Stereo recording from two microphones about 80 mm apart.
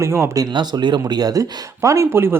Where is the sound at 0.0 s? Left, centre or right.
Right.